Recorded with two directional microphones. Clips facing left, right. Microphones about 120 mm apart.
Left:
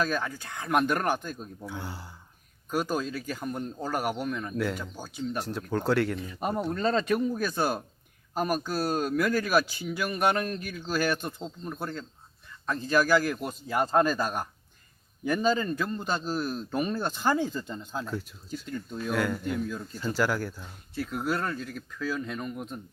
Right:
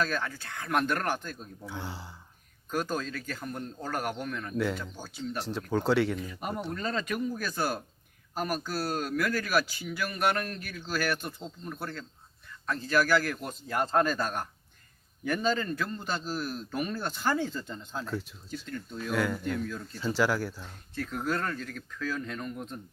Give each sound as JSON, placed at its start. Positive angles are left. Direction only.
{"t": 0.0, "sound": "a man's voice", "side_deg": 15}
{"t": 1.6, "sound": "speech", "side_deg": 0}
{"t": 2.6, "sound": "a man's voice", "side_deg": 10}
{"t": 5.4, "sound": "speech", "side_deg": 0}
{"t": 6.1, "sound": "a man's voice", "side_deg": 25}
{"t": 18.6, "sound": "a man's voice", "side_deg": 15}
{"t": 19.1, "sound": "speech", "side_deg": 0}
{"t": 19.5, "sound": "a man's voice", "side_deg": 15}
{"t": 20.0, "sound": "a man's voice", "side_deg": 0}